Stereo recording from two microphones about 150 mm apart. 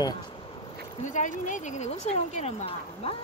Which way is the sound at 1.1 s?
55° left (ahead or behind).